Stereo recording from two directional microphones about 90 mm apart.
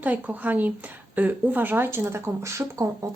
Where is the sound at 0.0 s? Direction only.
20° right (ahead or behind).